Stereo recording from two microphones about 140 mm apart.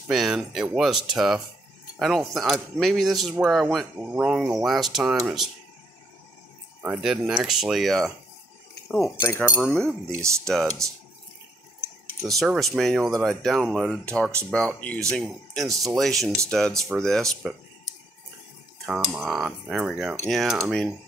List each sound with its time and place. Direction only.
0.1 s speech: 5° right (ahead or behind)
7.0 s speech: 5° right (ahead or behind)
9.2 s speech: 20° left (ahead or behind)
9.6 s speech: 5° left (ahead or behind)
12.2 s speech: centre (ahead or behind)
18.9 s speech: 5° right (ahead or behind)